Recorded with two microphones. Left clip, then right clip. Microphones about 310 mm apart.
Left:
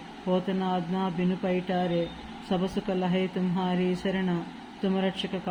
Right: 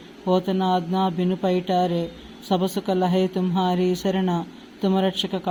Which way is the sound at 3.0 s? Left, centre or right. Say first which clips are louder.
Right 9 dB; right.